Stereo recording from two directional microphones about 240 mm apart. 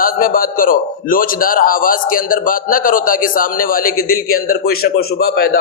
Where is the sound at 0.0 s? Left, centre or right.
Left.